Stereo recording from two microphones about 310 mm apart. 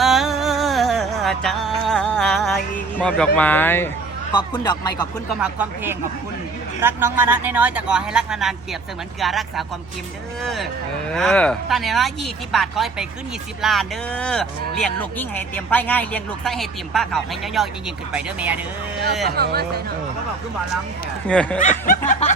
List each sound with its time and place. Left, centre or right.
0.0 s music: centre
4.3 s speech: centre
5.4 s speech: centre
19.4 s speech: right
21.2 s speech: centre
21.6 s snicker: left